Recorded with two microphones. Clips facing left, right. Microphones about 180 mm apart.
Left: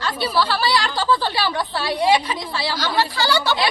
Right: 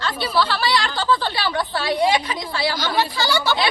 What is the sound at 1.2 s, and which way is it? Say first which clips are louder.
A woman's voice: left 1 dB; 40° left (ahead or behind).